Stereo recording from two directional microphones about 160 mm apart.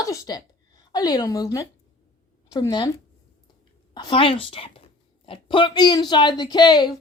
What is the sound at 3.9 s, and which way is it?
A woman's voice, 30° left (ahead or behind).